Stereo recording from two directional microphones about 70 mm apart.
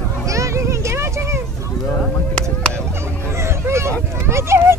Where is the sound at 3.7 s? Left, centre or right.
Right.